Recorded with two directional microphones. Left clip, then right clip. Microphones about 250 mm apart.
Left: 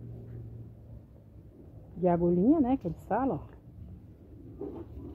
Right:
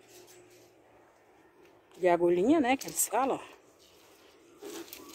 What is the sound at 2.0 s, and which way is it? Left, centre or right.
Speech, right.